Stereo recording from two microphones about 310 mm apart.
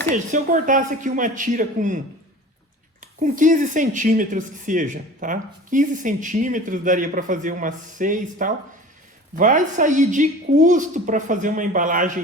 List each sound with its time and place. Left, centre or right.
0.1 s speech: right
3.0 s speech: right